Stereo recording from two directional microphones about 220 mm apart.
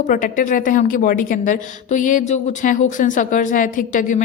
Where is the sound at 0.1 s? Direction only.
35° left (ahead or behind).